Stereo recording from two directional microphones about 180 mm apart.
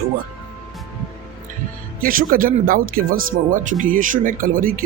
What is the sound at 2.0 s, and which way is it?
Speech, 50° right (ahead or behind).